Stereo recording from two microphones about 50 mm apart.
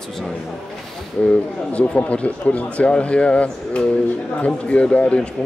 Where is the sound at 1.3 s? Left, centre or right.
Left.